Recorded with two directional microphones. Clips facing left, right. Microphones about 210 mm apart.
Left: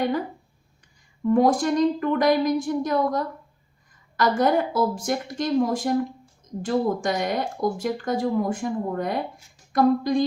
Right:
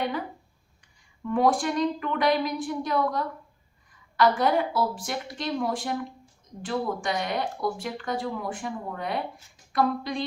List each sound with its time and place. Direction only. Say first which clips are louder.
1.2 s a woman's voice: left 5 dB; 40° left (ahead or behind)